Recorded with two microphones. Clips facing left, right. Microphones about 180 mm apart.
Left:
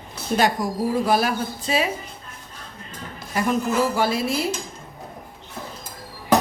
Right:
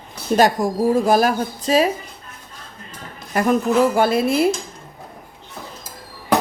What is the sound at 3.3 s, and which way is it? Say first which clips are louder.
A woman's voice: right 5 dB; 55° right (ahead or behind).